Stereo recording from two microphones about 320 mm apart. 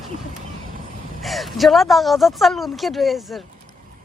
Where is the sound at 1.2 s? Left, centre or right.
Centre.